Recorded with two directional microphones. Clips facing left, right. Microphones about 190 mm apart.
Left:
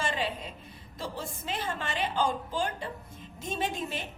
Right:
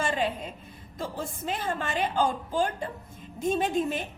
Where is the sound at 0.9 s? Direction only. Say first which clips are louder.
Right 3 dB; 50° right (ahead or behind).